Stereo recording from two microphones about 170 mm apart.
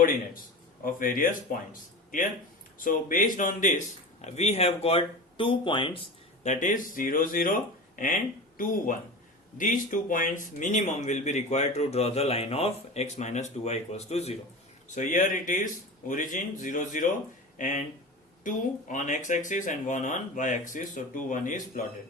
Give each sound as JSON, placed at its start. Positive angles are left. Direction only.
{"t": 0.9, "sound": "speech", "side_deg": 55}
{"t": 2.7, "sound": "a man's voice", "side_deg": 50}
{"t": 6.4, "sound": "a man's voice", "side_deg": 45}